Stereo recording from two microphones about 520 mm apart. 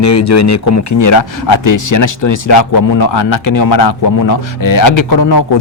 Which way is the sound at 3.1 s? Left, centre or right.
Left.